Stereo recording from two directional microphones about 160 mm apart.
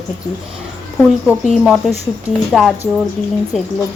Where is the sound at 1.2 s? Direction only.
5° right (ahead or behind).